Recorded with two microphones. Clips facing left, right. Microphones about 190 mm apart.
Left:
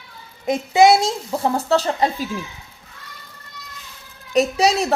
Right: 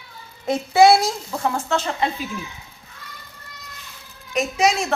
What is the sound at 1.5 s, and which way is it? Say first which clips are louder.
Speech: left 4 dB; 35° left (ahead or behind).